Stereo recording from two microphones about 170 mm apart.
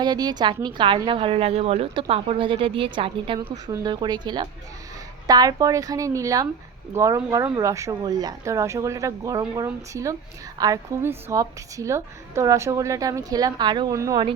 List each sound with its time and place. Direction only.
0.0 s a woman's voice: 25° right (ahead or behind)